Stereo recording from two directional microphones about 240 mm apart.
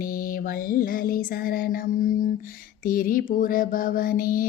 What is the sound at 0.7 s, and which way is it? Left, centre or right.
Child singing, left.